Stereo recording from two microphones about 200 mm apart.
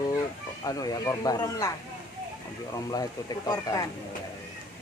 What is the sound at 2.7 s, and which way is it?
A woman's voice, 20° left (ahead or behind).